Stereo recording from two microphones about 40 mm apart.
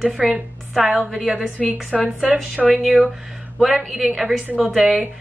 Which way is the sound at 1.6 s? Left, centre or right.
Centre.